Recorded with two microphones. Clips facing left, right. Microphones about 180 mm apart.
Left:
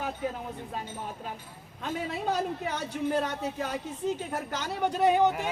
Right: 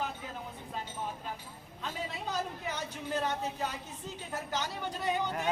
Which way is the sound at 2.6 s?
50° left (ahead or behind).